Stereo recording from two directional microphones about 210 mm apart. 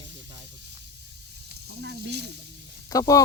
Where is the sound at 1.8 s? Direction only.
50° right (ahead or behind).